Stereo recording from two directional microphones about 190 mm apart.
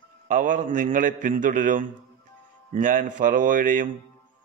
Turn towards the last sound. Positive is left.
turn(degrees=-45)  # may be behind; listen again after turning